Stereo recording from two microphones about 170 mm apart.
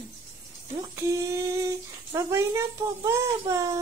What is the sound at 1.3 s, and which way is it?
Speech, 15° right (ahead or behind).